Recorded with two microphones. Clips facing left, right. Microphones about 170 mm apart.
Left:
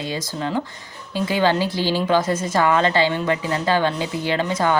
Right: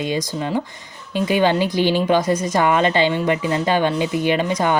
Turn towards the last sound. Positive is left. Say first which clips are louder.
# right 2 dB
turn(degrees=-15)  # may be behind; listen again after turning